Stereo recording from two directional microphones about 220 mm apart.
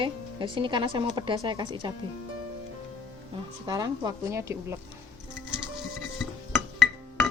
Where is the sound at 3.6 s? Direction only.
15° right (ahead or behind).